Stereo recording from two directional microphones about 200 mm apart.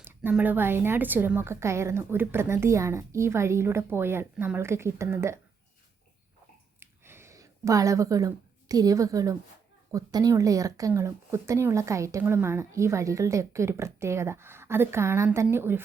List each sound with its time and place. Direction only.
0.0 s speech: 10° right (ahead or behind)
6.7 s a sound: 10° right (ahead or behind)
9.9 s speech: 20° right (ahead or behind)